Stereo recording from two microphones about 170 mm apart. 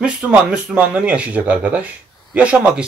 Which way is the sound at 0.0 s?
5° right (ahead or behind).